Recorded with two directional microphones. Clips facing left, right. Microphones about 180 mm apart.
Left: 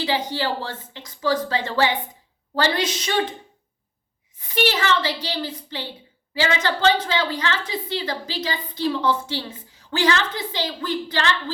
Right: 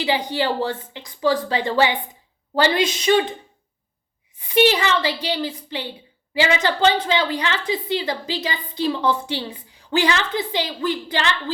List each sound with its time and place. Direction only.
0.0 s a woman's voice: 15° right (ahead or behind)
4.4 s a woman's voice: 15° right (ahead or behind)